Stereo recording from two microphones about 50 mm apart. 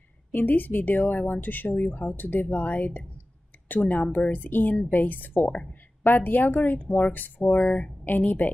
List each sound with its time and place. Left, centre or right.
0.3 s speech: left
5.5 s speech: left
6.0 s speech: left
7.6 s speech: left